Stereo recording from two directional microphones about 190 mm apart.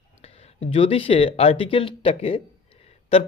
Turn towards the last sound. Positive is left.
turn(degrees=30)  # may be behind; listen again after turning